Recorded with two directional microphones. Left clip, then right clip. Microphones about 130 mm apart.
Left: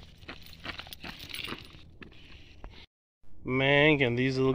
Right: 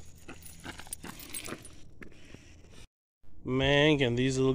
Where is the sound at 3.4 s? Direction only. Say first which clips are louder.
Left 2 dB; 20° right (ahead or behind).